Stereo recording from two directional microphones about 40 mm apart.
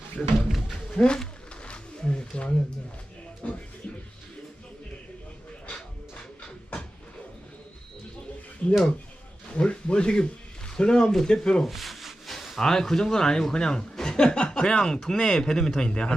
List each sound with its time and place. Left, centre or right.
0.2 s speech: centre
0.9 s speech: left
1.6 s roaring cats: left
3.4 s music: left
8.6 s a sound: left
10.8 s speech: left
11.6 s rub: centre
12.5 s speech: centre